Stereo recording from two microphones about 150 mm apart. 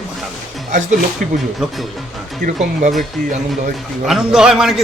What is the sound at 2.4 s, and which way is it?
Speech, 55° right (ahead or behind).